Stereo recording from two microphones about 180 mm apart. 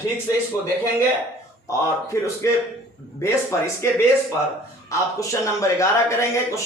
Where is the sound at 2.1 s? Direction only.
15° left (ahead or behind).